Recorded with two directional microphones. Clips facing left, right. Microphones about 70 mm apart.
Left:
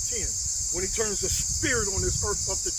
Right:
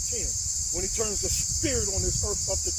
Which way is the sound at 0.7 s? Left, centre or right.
Left.